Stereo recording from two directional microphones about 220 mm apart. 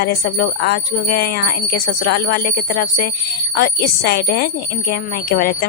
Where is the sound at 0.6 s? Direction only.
45° left (ahead or behind).